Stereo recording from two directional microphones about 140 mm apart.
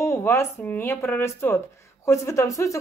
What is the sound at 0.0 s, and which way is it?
A woman's voice, 20° left (ahead or behind).